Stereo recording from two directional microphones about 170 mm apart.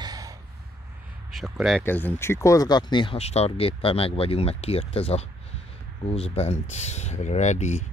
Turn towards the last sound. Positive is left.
turn(degrees=45)  # may be behind; listen again after turning